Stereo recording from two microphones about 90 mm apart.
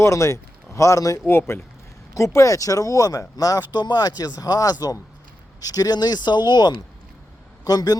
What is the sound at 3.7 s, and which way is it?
Speech, 55° left (ahead or behind).